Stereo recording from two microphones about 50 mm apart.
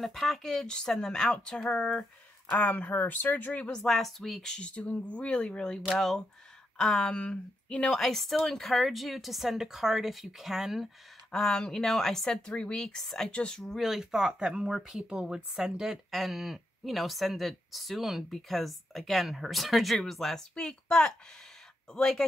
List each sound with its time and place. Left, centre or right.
0.0 s a woman's voice: centre
2.5 s speech: left
3.8 s speech: centre
4.6 s speech: left
5.9 s a woman's voice: centre; by 7.9 s left
7.9 s speech: centre
11.3 s a woman's voice: centre
13.3 s speech: left
13.7 s speech: centre
20.6 s a woman's voice: centre